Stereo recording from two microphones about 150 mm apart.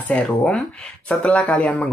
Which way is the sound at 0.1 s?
5° left (ahead or behind).